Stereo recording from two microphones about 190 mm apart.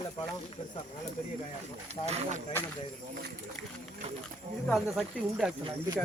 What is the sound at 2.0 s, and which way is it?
Speech, 35° right (ahead or behind).